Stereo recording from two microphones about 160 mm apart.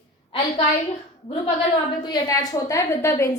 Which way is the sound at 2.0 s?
25° left (ahead or behind).